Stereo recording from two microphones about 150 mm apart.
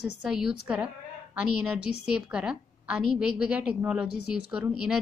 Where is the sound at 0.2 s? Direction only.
5° right (ahead or behind).